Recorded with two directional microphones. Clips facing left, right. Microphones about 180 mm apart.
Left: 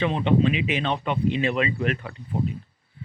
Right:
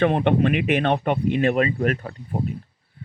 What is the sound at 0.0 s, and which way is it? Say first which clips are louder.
Speech: right 3 dB; 55° right (ahead or behind).